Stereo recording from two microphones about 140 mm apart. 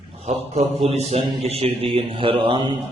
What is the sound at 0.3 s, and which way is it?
A man's voice, 45° right (ahead or behind).